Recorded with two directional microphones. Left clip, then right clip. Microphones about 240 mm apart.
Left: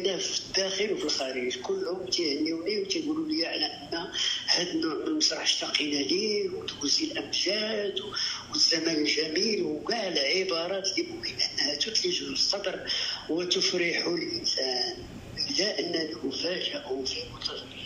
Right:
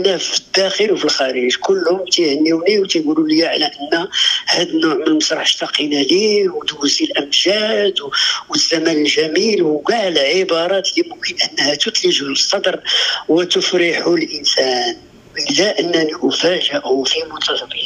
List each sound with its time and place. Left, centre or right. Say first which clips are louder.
0.0 s a man's voice: right 13 dB; right